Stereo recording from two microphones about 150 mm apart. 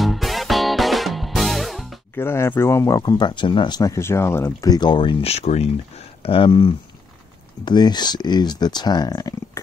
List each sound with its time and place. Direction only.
0.0 s music: centre (ahead or behind)
2.1 s speech: 15° left (ahead or behind)